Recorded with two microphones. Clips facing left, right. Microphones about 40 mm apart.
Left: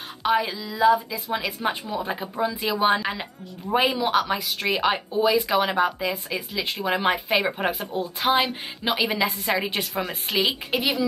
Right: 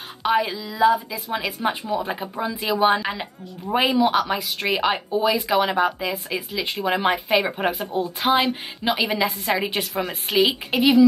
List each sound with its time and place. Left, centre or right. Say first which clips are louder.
0.2 s speech: right 2 dB; centre